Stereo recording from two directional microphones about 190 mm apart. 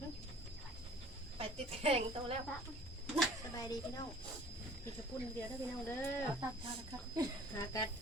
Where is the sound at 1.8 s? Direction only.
30° right (ahead or behind).